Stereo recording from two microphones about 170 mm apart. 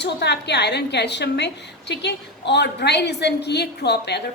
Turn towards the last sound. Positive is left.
turn(degrees=80)